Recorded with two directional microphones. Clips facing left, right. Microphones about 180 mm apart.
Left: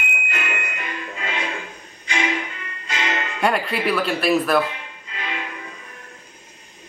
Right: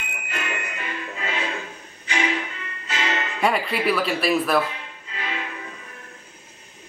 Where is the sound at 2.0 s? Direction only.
15° left (ahead or behind).